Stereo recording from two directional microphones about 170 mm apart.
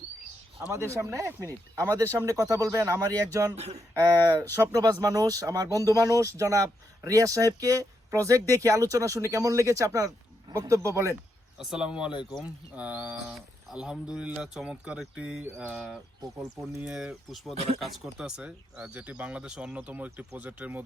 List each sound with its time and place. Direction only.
0.6 s speech: 15° right (ahead or behind)
3.5 s speech: 40° right (ahead or behind)
4.6 s speech: 20° right (ahead or behind)
11.5 s speech: 5° right (ahead or behind)
12.1 s speech: 30° left (ahead or behind)
12.7 s speech: 10° right (ahead or behind)
17.5 s speech: 40° right (ahead or behind)
17.7 s speech: centre (ahead or behind)